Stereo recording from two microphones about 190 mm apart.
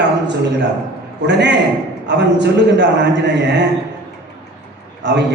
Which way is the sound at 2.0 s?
65° right (ahead or behind).